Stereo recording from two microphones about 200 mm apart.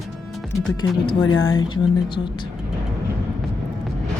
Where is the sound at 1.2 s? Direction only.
85° left.